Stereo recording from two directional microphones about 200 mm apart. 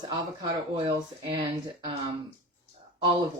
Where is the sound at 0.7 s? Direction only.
20° right (ahead or behind).